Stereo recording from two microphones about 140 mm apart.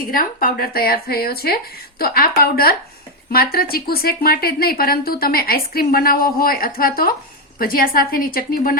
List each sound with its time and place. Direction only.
0.1 s a woman's voice: 90° left